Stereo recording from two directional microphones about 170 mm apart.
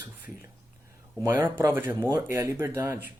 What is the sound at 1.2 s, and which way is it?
Speech, 10° right (ahead or behind).